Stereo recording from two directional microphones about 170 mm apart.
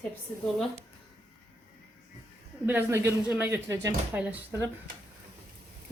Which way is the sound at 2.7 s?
15° right (ahead or behind).